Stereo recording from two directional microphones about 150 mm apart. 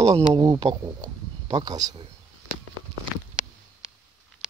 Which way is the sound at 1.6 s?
25° right (ahead or behind).